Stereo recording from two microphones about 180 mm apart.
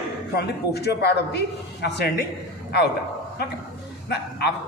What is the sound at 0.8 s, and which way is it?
A man's voice, 65° left (ahead or behind).